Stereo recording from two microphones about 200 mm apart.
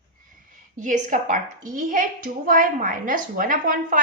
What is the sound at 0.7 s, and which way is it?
A woman's voice, 40° right (ahead or behind).